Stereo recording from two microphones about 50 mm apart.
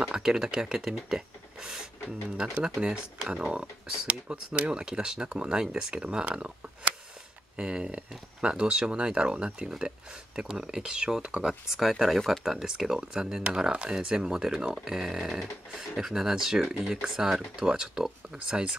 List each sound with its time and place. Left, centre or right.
0.0 s speech: centre
2.8 s speech: centre
6.0 s speech: right
7.5 s speech: centre